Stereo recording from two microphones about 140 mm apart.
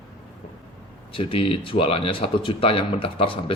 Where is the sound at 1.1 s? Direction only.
40° left (ahead or behind).